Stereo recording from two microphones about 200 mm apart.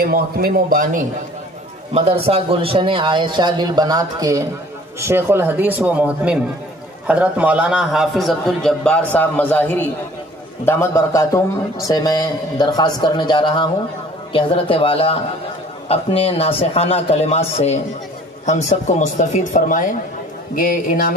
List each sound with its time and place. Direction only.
0.0 s speech: 45° right (ahead or behind)
2.0 s a man's voice: 30° right (ahead or behind); by 21.1 s 45° left (ahead or behind)